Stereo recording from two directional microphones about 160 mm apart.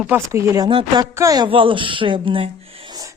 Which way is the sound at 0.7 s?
35° right (ahead or behind).